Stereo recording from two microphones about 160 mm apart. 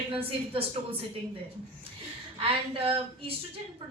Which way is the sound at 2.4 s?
35° right (ahead or behind).